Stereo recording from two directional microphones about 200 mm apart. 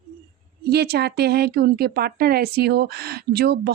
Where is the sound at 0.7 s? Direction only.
50° right (ahead or behind).